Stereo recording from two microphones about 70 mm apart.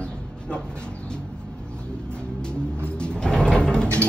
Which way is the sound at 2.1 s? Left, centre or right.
Centre.